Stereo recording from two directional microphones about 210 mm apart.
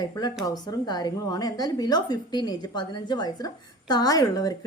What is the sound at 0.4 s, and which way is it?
A woman's voice, 20° left (ahead or behind).